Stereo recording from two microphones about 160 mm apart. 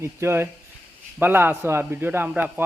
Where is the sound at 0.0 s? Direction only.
15° right (ahead or behind).